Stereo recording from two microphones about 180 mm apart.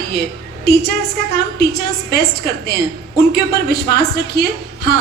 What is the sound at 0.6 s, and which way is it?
A woman's voice, 60° left (ahead or behind).